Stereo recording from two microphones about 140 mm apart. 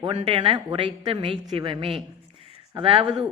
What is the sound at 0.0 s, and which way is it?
A man's voice, 40° right (ahead or behind).